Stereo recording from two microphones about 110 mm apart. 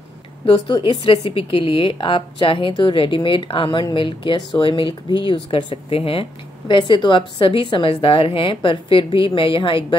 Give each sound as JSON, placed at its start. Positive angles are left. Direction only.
{"t": 0.7, "sound": "a woman's voice", "side_deg": 30}
{"t": 1.3, "sound": "a woman's voice", "side_deg": 55}
{"t": 6.7, "sound": "a woman's voice", "side_deg": 45}